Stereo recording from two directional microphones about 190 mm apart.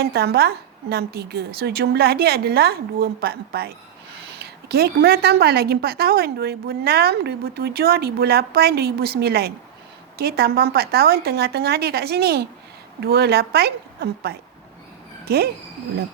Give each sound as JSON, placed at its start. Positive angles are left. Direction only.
{"t": 0.0, "sound": "a woman's voice", "side_deg": -55}